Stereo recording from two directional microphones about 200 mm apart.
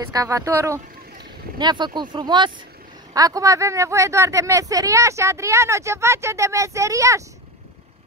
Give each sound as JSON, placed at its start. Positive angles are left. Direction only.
{"t": 0.1, "sound": "speech", "side_deg": -15}